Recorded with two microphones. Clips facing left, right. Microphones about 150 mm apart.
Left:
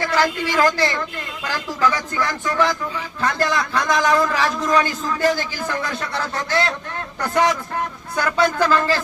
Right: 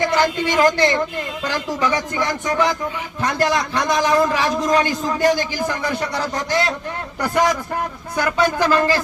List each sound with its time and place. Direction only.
0.0 s a woman's voice: 20° right (ahead or behind)
8.1 s a man's voice: 10° right (ahead or behind)